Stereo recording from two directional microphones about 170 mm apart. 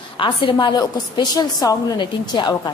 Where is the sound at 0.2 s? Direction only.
30° left (ahead or behind).